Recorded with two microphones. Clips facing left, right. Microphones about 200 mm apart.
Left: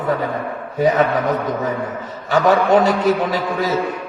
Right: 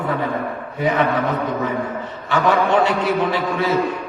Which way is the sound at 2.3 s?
40° left (ahead or behind).